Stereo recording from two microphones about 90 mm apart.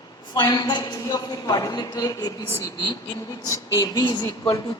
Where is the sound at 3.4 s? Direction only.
35° left (ahead or behind).